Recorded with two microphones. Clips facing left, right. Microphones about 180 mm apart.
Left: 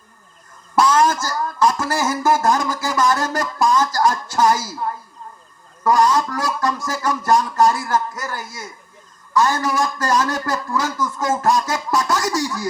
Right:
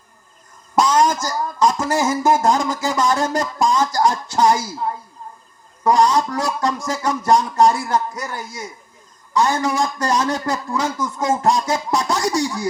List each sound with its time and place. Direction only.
0.8 s speech: 15° right (ahead or behind)